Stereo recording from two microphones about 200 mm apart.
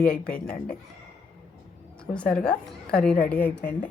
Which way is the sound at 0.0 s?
5° left (ahead or behind).